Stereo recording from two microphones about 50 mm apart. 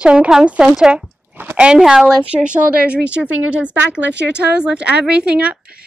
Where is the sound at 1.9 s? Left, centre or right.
Centre.